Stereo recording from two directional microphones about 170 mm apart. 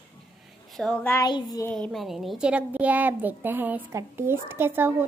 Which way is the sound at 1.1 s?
25° left (ahead or behind).